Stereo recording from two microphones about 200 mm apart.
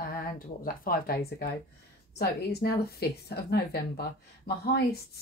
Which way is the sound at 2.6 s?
55° left (ahead or behind).